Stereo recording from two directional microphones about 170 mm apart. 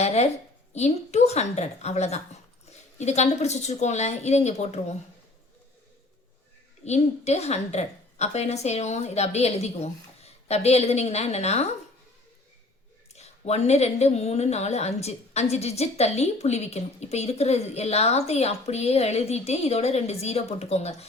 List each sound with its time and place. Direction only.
0.0 s a sound: 40° left (ahead or behind)
0.7 s speech: 40° left (ahead or behind)
6.8 s speech: 40° left (ahead or behind)
13.1 s speech: 40° left (ahead or behind)